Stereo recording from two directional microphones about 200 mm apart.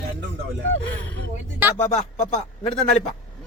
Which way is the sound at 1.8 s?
35° left (ahead or behind).